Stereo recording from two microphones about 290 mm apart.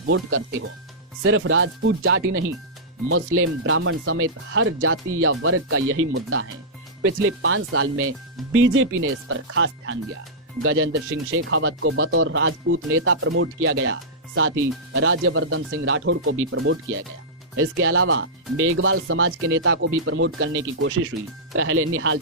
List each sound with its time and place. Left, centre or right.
0.0 s speech: right